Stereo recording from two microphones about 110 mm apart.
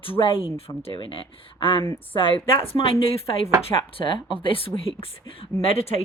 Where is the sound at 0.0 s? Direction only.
55° left (ahead or behind).